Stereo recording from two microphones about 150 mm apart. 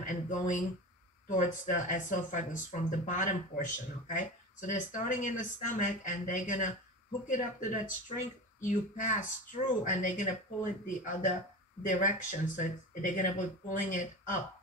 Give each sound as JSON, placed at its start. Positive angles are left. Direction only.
{"t": 0.0, "sound": "speech", "side_deg": 60}